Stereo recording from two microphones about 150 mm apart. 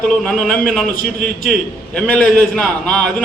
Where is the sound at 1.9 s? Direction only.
5° left (ahead or behind).